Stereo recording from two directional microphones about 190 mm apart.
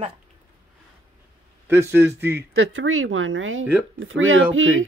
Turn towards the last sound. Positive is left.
turn(degrees=-90)